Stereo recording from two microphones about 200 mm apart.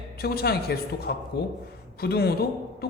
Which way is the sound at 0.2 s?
50° left (ahead or behind).